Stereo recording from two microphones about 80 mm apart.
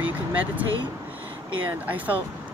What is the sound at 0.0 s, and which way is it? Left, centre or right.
Vehicle, centre.